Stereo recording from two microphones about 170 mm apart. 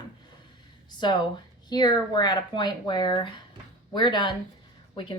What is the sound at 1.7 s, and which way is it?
A woman's voice, 25° left (ahead or behind).